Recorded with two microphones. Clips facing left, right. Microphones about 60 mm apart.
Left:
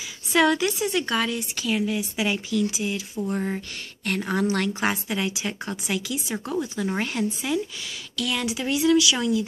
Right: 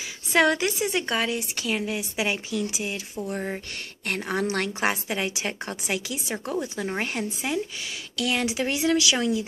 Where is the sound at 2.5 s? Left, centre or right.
Right.